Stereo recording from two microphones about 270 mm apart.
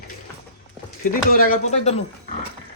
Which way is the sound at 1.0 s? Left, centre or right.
Left.